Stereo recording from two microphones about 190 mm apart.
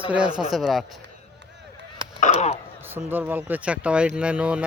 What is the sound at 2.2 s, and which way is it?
Speech, 35° left (ahead or behind).